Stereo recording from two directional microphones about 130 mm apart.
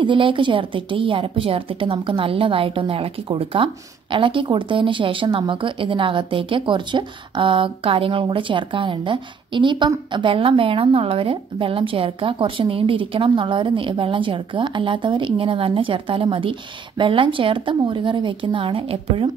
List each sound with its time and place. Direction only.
0.0 s a woman's voice: 40° right (ahead or behind)